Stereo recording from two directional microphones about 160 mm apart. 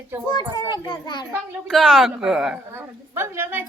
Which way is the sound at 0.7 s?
25° left (ahead or behind).